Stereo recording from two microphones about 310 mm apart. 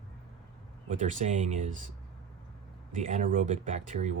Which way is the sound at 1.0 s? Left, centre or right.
Right.